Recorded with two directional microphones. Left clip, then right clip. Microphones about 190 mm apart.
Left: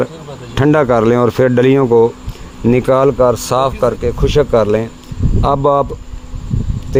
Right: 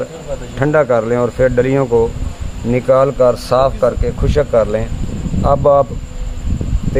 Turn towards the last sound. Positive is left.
turn(degrees=35)  # may be behind; listen again after turning